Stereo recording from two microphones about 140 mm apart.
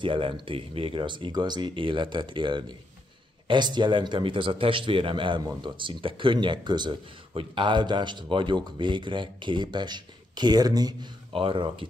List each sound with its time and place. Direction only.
0.0 s a man's voice: 35° right (ahead or behind)